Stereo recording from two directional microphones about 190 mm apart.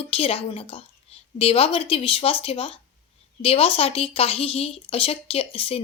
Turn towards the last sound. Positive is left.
turn(degrees=30)  # may be behind; listen again after turning